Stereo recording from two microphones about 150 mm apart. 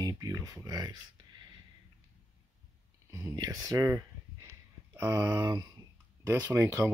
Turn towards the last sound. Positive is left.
turn(degrees=-20)  # may be behind; listen again after turning